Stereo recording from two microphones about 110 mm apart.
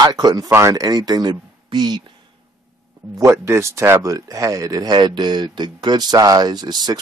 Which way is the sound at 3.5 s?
25° right (ahead or behind).